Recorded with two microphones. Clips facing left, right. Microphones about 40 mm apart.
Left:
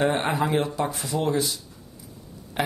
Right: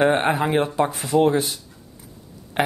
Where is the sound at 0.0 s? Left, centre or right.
Right.